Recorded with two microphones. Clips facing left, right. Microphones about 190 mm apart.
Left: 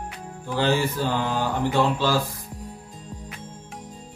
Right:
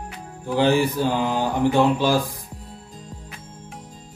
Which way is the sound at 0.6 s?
15° right (ahead or behind).